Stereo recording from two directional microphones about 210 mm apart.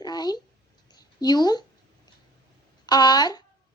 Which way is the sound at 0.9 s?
20° left (ahead or behind).